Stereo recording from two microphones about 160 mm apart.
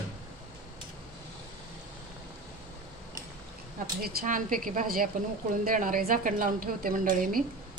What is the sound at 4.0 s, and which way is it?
A woman's voice, 70° right (ahead or behind).